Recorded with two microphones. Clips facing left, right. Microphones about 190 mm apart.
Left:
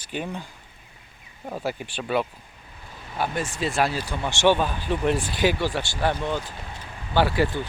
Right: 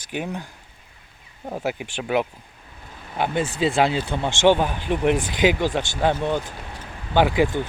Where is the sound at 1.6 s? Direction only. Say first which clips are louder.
Right 2 dB; 15° right (ahead or behind).